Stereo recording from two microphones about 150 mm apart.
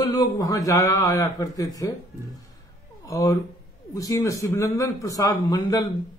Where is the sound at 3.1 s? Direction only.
20° left (ahead or behind).